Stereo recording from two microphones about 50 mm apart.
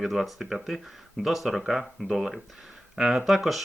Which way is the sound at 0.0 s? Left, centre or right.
Centre.